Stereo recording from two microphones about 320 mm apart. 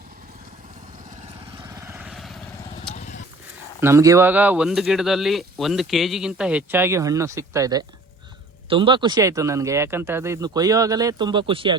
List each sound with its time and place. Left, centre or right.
1.7 s vehicle: centre
2.9 s clip-clop: left
3.8 s speech: centre